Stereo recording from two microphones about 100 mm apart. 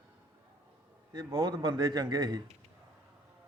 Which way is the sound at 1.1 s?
45° right (ahead or behind).